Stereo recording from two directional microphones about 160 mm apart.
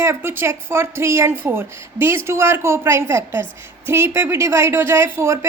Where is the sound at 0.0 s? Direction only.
15° right (ahead or behind).